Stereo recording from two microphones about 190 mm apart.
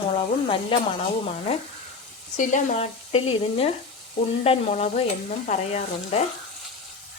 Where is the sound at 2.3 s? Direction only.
40° left (ahead or behind).